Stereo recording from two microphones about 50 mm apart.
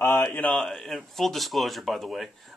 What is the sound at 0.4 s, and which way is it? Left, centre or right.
Speech, left.